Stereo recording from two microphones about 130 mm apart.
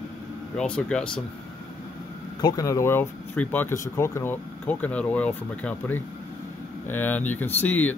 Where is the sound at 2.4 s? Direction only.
30° left (ahead or behind).